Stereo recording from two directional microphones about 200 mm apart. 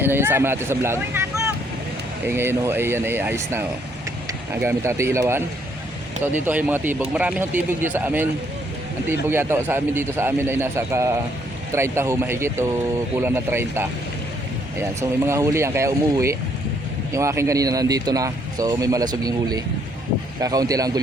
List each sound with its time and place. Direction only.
0.0 s speech: 10° right (ahead or behind)
9.3 s speech: 10° right (ahead or behind)
15.3 s speech: 15° right (ahead or behind)